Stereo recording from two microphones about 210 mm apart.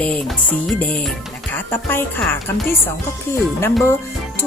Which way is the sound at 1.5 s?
10° left (ahead or behind).